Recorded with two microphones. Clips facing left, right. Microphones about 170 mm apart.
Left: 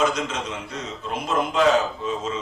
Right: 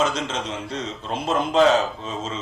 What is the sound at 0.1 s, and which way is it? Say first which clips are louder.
Speech: even; 30° right (ahead or behind).